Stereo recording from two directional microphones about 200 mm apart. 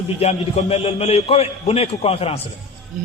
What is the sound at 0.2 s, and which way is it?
A man's voice, 30° left (ahead or behind).